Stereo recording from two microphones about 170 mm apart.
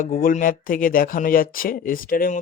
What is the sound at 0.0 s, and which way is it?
Speech, 55° left (ahead or behind).